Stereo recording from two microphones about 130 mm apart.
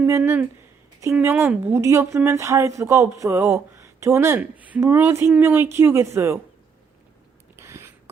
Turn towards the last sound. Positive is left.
turn(degrees=-20)  # may be behind; listen again after turning